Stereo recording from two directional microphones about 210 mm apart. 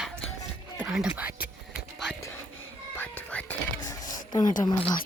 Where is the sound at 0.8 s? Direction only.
5° right (ahead or behind).